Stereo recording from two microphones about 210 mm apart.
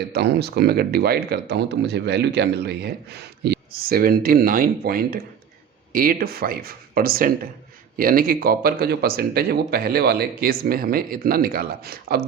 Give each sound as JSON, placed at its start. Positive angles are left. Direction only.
{"t": 0.1, "sound": "speech", "side_deg": -50}